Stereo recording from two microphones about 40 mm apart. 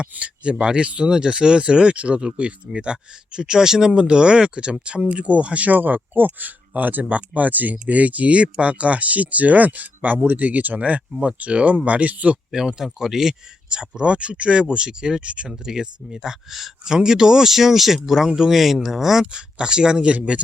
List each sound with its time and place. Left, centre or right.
0.0 s speech: right
12.5 s speech: centre; by 15.5 s right
15.6 s speech: centre
16.8 s speech: centre